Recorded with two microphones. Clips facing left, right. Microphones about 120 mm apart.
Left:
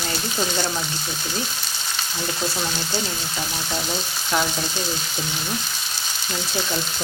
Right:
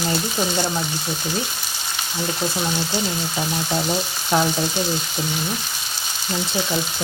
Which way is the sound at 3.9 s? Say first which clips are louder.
Right 3 dB; 20° right (ahead or behind).